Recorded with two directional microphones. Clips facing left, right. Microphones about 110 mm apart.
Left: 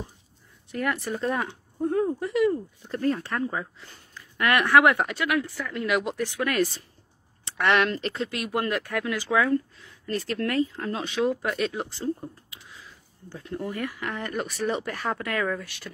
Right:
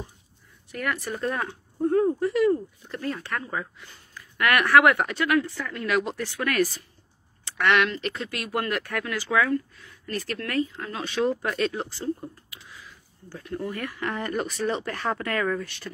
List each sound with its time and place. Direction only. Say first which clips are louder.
0.7 s speech: left 2 dB; 25° left (ahead or behind)
2.9 s speech: left 6 dB; 35° left (ahead or behind)
3.3 s speech: left 2 dB; 20° left (ahead or behind)
5.1 s speech: right 3 dB; 5° left (ahead or behind)
5.7 s speech: even; 15° left (ahead or behind)
11.2 s speech: right 1 dB; 10° left (ahead or behind)
13.3 s speech: right 1 dB; 20° left (ahead or behind)
13.9 s speech: right 2 dB; centre (ahead or behind)